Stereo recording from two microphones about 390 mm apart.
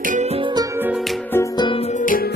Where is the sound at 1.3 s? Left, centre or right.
Centre.